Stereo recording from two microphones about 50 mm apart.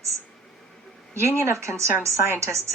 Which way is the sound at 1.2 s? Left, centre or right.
Right.